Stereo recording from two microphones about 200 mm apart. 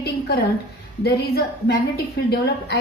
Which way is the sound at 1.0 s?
55° left (ahead or behind).